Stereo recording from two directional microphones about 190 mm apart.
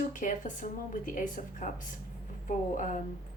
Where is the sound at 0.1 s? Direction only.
40° left (ahead or behind).